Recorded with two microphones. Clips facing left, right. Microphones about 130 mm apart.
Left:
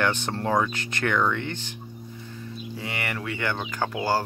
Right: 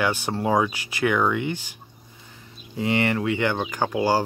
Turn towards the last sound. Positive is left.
turn(degrees=-15)  # may be behind; listen again after turning